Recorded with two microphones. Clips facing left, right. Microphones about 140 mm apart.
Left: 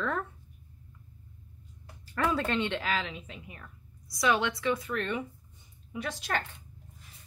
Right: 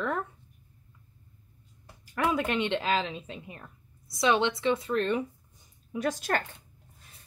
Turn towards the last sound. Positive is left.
turn(degrees=-45)  # may be behind; listen again after turning